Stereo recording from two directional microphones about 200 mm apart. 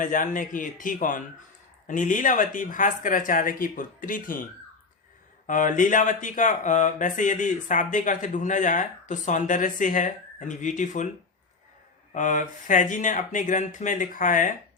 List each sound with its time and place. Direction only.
0.0 s speech: 40° left (ahead or behind)
5.5 s speech: 40° left (ahead or behind)
12.1 s speech: 40° left (ahead or behind)